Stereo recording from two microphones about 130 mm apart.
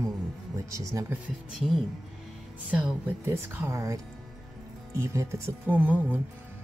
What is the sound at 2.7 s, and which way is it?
Speech, 15° right (ahead or behind).